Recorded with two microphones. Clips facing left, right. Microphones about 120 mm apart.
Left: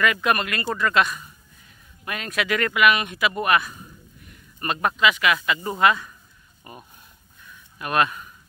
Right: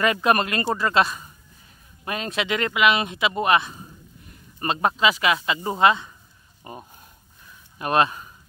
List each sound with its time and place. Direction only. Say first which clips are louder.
0.0 s speech: right 2 dB; 35° right (ahead or behind)